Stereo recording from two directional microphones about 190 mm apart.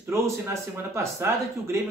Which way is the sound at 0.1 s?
15° right (ahead or behind).